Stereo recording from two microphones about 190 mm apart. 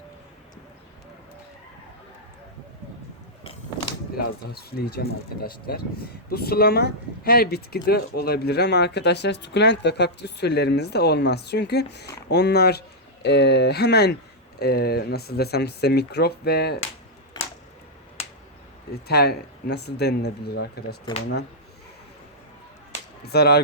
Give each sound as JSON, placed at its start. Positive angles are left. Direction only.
{"t": 3.4, "sound": "a sound", "side_deg": 30}
{"t": 4.2, "sound": "speech", "side_deg": 55}
{"t": 19.0, "sound": "speech", "side_deg": 55}
{"t": 23.2, "sound": "speech", "side_deg": 55}